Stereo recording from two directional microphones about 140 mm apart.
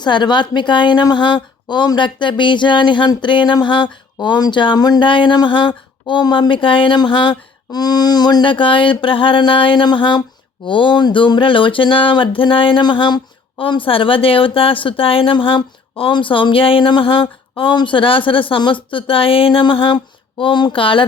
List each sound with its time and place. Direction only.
0.0 s a woman's voice: 30° left (ahead or behind)